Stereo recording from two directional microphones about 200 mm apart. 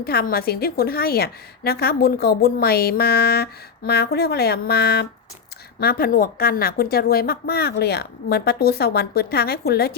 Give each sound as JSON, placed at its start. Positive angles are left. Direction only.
{"t": 0.0, "sound": "a woman's voice", "side_deg": 50}